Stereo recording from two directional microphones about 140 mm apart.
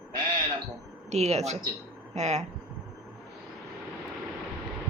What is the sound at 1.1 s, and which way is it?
A woman's voice, 50° right (ahead or behind).